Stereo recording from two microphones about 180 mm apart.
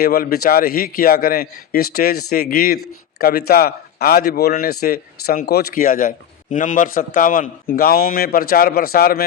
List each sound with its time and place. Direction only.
0.0 s speech: 55° left (ahead or behind)